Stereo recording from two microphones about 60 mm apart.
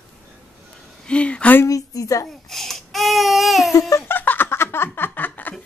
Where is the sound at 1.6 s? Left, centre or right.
Left.